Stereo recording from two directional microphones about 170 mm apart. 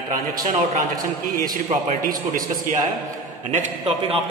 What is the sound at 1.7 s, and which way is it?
A man's voice, 50° right (ahead or behind).